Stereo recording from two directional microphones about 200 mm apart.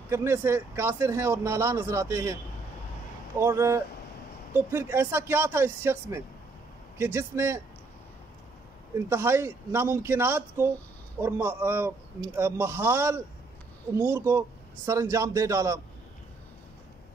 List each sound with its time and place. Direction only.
0.1 s speech: 15° right (ahead or behind)
3.3 s speech: 15° right (ahead or behind)
8.9 s speech: 15° right (ahead or behind)